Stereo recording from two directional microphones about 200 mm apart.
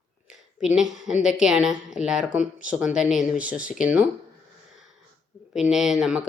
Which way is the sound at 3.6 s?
40° left (ahead or behind).